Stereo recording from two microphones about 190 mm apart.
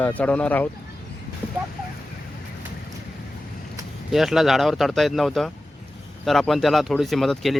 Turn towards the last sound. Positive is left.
turn(degrees=0)  # may be behind; listen again after turning